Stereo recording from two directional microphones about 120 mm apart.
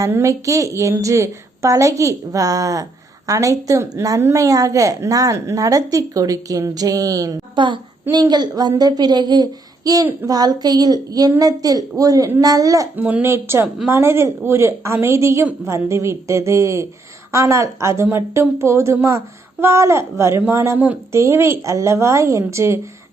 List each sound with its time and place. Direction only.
0.0 s a woman's voice: 25° right (ahead or behind)
13.0 s a woman's voice: 15° right (ahead or behind)
21.2 s a woman's voice: 25° right (ahead or behind)